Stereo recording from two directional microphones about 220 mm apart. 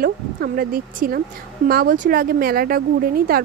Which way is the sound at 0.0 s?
40° right (ahead or behind).